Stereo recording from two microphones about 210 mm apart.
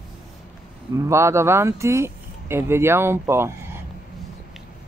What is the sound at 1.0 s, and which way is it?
Speech, 15° right (ahead or behind).